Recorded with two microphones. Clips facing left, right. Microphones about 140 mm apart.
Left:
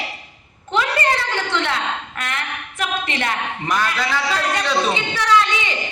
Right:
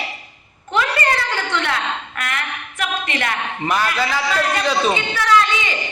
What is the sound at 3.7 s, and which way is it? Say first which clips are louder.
Speech: right 1 dB; 10° right (ahead or behind).